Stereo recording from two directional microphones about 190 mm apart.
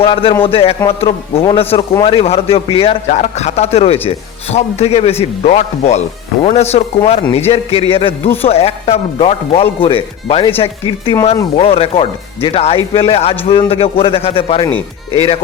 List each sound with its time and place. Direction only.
0.0 s a man's voice: 30° left (ahead or behind)